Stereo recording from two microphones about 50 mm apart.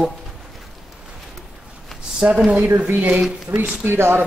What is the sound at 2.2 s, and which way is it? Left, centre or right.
Speech, centre.